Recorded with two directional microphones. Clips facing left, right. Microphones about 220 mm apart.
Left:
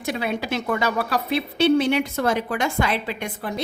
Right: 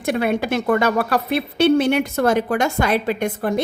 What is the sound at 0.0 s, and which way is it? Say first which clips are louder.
A woman's voice: right 6 dB; 55° right (ahead or behind).